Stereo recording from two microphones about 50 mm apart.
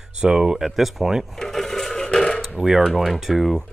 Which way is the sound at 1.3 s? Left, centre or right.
Centre.